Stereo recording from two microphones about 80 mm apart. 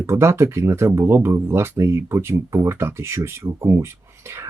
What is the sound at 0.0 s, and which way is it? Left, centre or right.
Speech, right.